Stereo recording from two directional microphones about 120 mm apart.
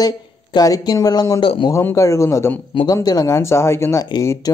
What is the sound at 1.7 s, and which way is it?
Speech, 20° left (ahead or behind).